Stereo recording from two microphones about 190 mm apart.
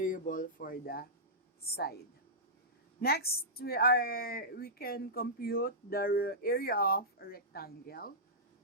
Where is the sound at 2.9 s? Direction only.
55° left (ahead or behind).